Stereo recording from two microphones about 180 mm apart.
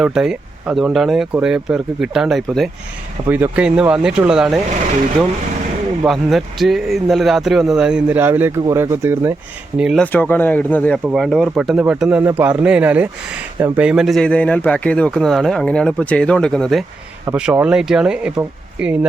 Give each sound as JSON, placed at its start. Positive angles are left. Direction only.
{"t": 0.0, "sound": "speech", "side_deg": -5}
{"t": 6.1, "sound": "speech", "side_deg": 0}
{"t": 9.7, "sound": "speech", "side_deg": 0}
{"t": 11.1, "sound": "speech", "side_deg": 0}